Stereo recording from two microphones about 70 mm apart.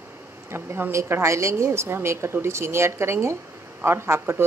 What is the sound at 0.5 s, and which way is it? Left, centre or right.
A woman's voice, right.